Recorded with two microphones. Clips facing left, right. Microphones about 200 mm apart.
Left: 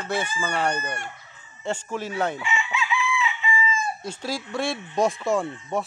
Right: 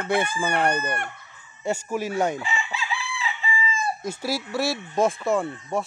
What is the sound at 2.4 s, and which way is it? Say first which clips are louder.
Chicken: left 2 dB; 35° right (ahead or behind).